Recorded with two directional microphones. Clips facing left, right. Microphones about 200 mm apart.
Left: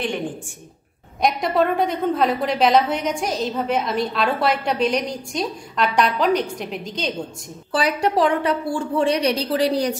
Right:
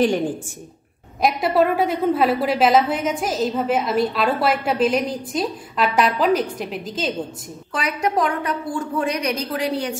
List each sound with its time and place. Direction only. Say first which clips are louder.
1.2 s a woman's voice: right 1 dB; 5° right (ahead or behind)
7.7 s speech: left 2 dB; 35° left (ahead or behind)